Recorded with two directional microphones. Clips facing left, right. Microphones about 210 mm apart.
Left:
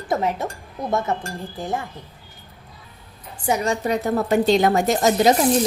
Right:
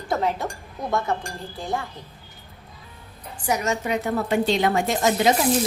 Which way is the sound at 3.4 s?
30° left (ahead or behind).